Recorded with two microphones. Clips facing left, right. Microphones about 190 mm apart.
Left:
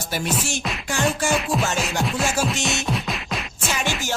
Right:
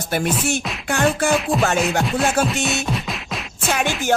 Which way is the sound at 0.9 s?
60° right (ahead or behind).